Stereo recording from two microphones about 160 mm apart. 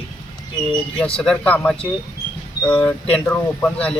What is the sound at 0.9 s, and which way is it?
Speech, 5° left (ahead or behind).